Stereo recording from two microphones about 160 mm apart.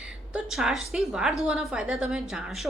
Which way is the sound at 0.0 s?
5° right (ahead or behind).